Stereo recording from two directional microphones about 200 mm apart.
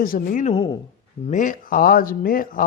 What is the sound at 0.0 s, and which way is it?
Speech, 45° left (ahead or behind).